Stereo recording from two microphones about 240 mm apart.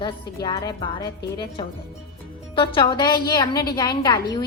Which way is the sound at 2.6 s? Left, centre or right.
Centre.